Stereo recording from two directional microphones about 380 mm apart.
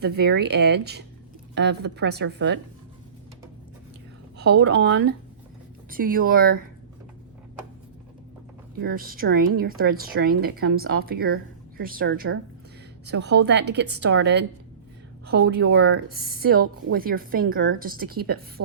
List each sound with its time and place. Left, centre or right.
0.0 s a woman's voice: right
4.4 s a woman's voice: right
8.8 s a woman's voice: right
15.6 s a woman's voice: right